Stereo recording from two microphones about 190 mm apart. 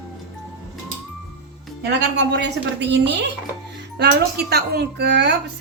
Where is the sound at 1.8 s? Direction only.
60° right (ahead or behind).